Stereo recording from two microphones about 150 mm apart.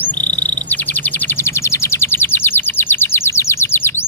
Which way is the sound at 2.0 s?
15° left (ahead or behind).